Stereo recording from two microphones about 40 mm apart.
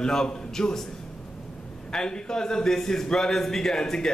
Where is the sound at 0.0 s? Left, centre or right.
Centre.